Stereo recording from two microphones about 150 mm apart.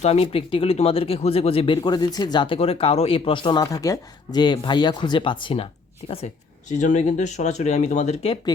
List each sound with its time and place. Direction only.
0.0 s speech: 45° left (ahead or behind)
6.7 s speech: 55° left (ahead or behind)